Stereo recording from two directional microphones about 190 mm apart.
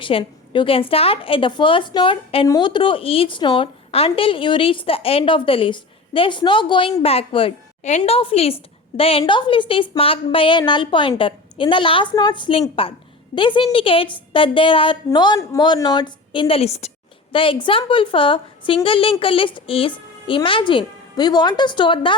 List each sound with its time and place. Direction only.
0.0 s a woman's voice: 25° left (ahead or behind)